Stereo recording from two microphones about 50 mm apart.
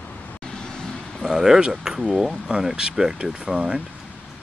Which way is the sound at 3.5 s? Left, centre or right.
Right.